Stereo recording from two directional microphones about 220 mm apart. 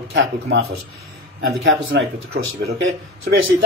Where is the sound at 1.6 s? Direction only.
60° right (ahead or behind).